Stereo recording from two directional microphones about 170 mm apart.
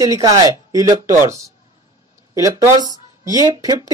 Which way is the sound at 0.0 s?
20° right (ahead or behind).